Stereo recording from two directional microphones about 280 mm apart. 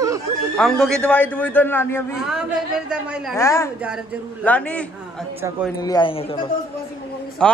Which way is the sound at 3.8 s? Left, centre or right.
Centre.